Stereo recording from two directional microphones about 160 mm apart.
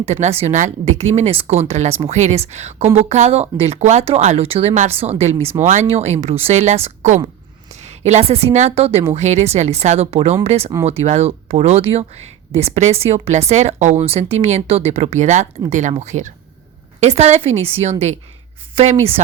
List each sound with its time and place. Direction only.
0.0 s a woman's voice: 45° right (ahead or behind)